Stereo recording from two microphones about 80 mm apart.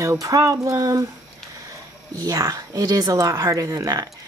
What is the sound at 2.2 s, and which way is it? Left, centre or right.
Speech, right.